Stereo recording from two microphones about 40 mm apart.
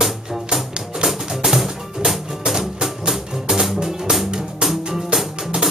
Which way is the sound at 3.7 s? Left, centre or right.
Centre.